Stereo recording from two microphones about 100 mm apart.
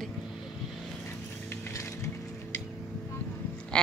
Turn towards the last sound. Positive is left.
turn(degrees=10)  # may be behind; listen again after turning